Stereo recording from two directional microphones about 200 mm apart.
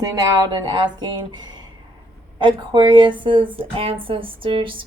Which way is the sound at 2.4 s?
25° right (ahead or behind).